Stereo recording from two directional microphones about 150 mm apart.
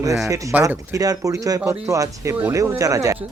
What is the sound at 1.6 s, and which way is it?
Speech, 10° right (ahead or behind).